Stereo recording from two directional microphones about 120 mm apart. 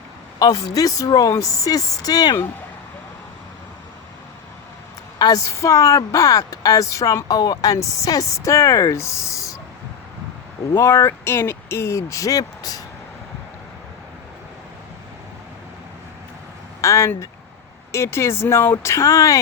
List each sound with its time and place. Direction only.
0.3 s a woman's voice: 30° left (ahead or behind)
5.2 s a woman's voice: 25° left (ahead or behind)
10.8 s a woman's voice: 25° left (ahead or behind)
16.8 s a woman's voice: 25° left (ahead or behind)